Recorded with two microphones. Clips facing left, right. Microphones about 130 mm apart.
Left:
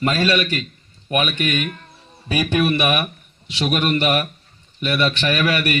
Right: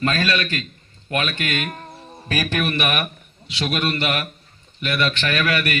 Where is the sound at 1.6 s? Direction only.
40° right (ahead or behind).